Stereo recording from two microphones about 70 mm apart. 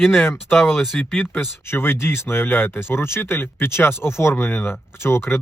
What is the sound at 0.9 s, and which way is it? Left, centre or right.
Speech, centre.